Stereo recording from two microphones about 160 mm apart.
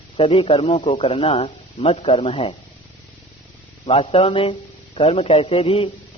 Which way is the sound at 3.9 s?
35° left (ahead or behind).